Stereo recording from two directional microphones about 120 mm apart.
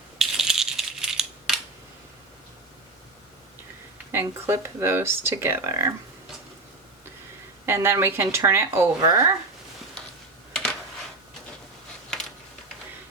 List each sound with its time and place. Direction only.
0.2 s coin: 5° right (ahead or behind)
4.1 s speech: 20° right (ahead or behind)
7.6 s speech: 20° right (ahead or behind)